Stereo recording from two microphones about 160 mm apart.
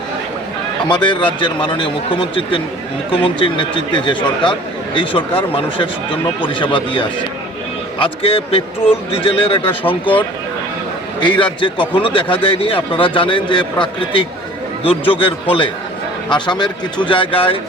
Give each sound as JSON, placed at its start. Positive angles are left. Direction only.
{"t": 0.9, "sound": "a man's voice", "side_deg": 30}